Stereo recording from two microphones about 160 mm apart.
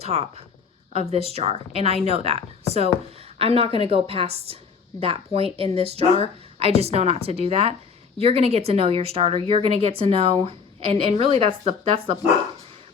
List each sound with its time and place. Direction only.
0.0 s speech: 40° right (ahead or behind)